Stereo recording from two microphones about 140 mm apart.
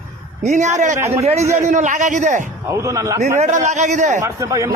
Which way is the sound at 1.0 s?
20° right (ahead or behind).